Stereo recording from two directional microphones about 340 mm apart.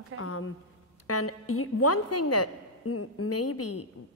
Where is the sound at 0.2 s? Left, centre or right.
Left.